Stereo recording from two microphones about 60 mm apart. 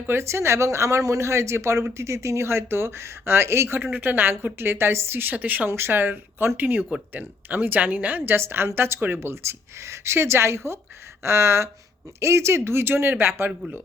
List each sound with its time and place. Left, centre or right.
0.2 s speech: right
3.9 s a woman's voice: right
5.6 s a woman's voice: right
9.3 s speech: right